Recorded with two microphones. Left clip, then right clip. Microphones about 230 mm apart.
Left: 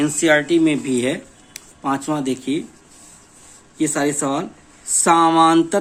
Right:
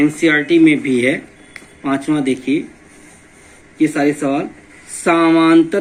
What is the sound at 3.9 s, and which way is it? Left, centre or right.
Speech, left.